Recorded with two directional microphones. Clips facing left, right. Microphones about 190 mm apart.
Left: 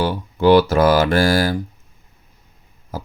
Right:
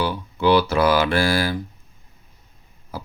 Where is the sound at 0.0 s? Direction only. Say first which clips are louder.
Left 4 dB; 45° left (ahead or behind).